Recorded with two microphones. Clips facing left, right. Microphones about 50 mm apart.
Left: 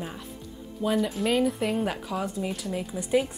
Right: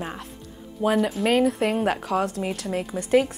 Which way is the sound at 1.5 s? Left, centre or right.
Right.